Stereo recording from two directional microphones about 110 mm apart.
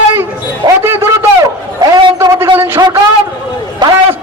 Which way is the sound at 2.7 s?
40° right (ahead or behind).